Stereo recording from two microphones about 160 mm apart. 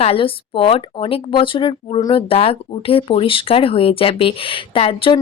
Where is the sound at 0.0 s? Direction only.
35° left (ahead or behind).